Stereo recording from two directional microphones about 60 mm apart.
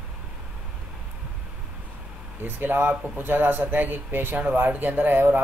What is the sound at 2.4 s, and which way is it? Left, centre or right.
Speech, right.